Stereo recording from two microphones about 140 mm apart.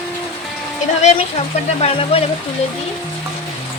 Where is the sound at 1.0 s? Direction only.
50° left (ahead or behind).